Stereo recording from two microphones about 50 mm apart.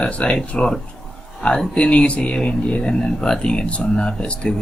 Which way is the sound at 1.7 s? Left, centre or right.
Left.